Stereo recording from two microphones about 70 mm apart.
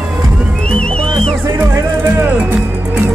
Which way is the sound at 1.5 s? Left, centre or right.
Right.